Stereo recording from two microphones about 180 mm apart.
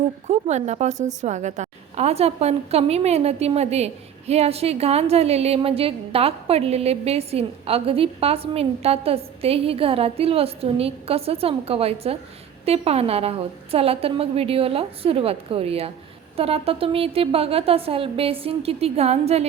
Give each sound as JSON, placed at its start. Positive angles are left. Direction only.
{"t": 0.3, "sound": "a woman's voice", "side_deg": -40}